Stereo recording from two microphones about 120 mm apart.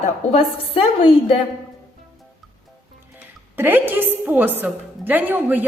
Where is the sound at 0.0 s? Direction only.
55° left (ahead or behind).